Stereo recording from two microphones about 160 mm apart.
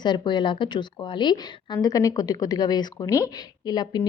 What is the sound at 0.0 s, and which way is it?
A woman's voice, 30° left (ahead or behind).